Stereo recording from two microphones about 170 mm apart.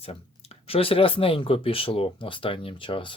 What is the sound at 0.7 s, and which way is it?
Speech, 35° left (ahead or behind).